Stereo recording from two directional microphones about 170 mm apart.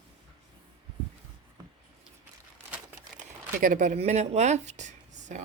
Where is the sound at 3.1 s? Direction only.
50° right (ahead or behind).